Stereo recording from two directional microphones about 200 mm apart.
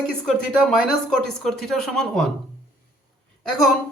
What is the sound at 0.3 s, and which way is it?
Speech, centre (ahead or behind).